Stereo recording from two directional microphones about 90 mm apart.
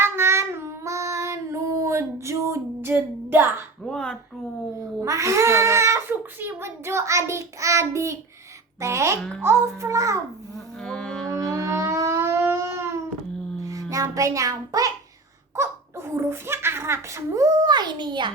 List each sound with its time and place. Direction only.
0.0 s child singing: 30° right (ahead or behind)
3.8 s speech: 5° left (ahead or behind)
5.0 s a child's voice: 35° right (ahead or behind)
10.8 s music: 10° left (ahead or behind)
11.5 s music: 35° right (ahead or behind)
13.9 s a child's voice: 40° right (ahead or behind); by 18.3 s 60° right (ahead or behind)